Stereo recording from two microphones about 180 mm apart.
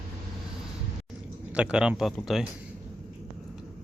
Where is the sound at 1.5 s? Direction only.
5° right (ahead or behind).